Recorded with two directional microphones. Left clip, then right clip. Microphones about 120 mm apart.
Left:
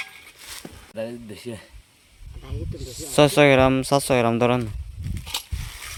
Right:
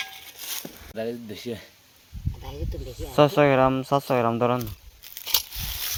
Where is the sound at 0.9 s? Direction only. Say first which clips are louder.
Right 1 dB; 40° left (ahead or behind).